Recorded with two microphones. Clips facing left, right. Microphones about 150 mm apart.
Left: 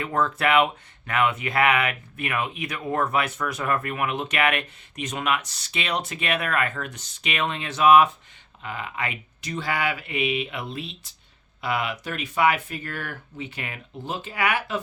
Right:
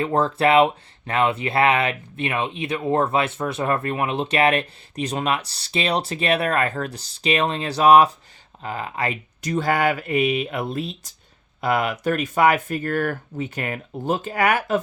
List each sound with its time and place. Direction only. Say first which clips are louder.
0.0 s speech: right 5 dB; 30° right (ahead or behind)